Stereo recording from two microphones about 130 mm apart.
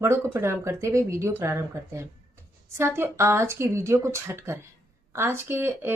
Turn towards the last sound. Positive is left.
turn(degrees=-20)  # may be behind; listen again after turning